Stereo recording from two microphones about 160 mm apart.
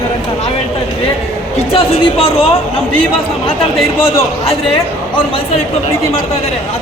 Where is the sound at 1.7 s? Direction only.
35° left (ahead or behind).